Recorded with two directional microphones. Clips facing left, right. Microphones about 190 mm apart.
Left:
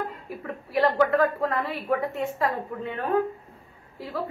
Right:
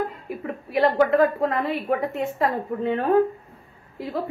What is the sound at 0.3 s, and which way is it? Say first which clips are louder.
A woman's voice: right 3 dB; 20° right (ahead or behind).